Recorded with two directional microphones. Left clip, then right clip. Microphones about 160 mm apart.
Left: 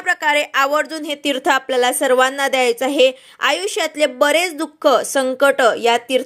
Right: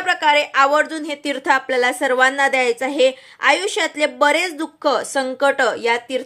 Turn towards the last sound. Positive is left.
turn(degrees=15)  # may be behind; listen again after turning